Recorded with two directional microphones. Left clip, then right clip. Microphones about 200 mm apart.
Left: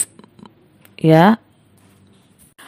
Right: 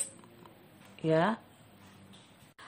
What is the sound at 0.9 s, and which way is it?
Speech, 50° left (ahead or behind).